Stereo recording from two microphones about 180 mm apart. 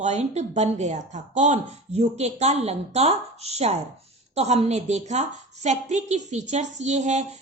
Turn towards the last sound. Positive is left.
turn(degrees=-40)  # may be behind; listen again after turning